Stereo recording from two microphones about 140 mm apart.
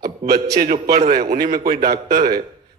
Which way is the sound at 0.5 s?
90° right.